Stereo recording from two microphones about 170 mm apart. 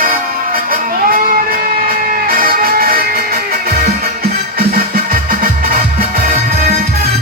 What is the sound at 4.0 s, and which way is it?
Music, 60° right (ahead or behind).